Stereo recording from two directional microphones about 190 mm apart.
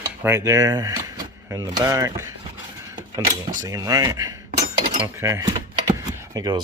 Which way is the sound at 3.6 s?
20° right (ahead or behind).